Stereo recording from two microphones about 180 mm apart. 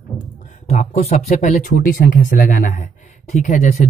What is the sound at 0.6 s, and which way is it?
Speech, 40° left (ahead or behind).